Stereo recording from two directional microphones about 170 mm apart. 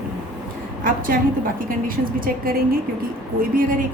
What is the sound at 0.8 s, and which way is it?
Speech, 55° right (ahead or behind).